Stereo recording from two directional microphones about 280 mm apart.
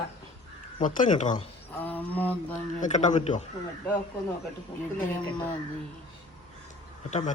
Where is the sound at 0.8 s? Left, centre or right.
Left.